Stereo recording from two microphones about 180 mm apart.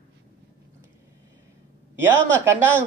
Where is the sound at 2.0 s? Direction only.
15° right (ahead or behind).